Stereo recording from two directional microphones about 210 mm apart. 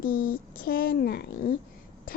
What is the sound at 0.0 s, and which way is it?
Speech, 40° left (ahead or behind).